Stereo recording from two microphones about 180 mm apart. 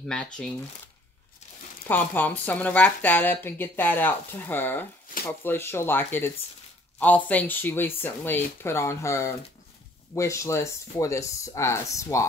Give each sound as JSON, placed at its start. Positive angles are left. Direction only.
{"t": 0.1, "sound": "speech", "side_deg": 5}
{"t": 1.9, "sound": "speech", "side_deg": 10}